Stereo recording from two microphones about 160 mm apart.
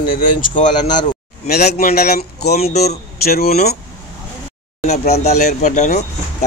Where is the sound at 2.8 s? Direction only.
75° left (ahead or behind).